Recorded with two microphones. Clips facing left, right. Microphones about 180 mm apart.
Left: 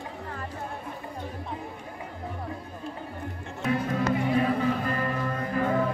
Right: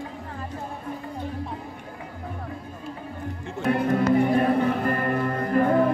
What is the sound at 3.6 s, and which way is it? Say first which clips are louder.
Music: right 5 dB; 55° right (ahead or behind).